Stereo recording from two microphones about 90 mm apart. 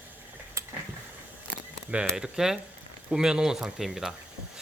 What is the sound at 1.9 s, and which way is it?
Speech, 10° right (ahead or behind).